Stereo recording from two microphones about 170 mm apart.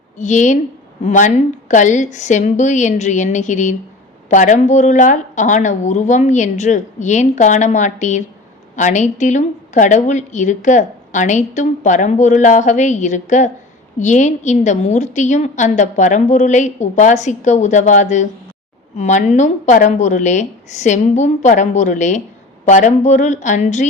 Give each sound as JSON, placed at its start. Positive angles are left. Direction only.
{"t": 0.2, "sound": "a woman's voice", "side_deg": 45}